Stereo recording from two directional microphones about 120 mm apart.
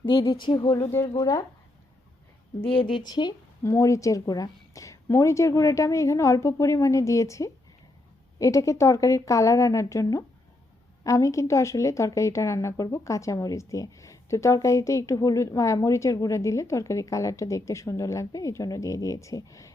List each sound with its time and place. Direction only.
0.0 s speech: 45° left (ahead or behind)
0.8 s speech: 25° left (ahead or behind)
1.0 s speech: 35° left (ahead or behind)
2.6 s speech: 45° left (ahead or behind)
3.6 s speech: 25° left (ahead or behind)